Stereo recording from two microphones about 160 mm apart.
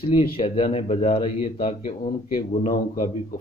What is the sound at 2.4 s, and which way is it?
Speech, 60° left (ahead or behind).